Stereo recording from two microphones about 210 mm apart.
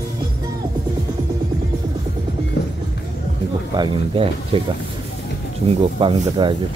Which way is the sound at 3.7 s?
25° right (ahead or behind).